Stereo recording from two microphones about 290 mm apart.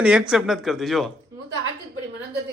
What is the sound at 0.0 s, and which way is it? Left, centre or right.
Speech, centre.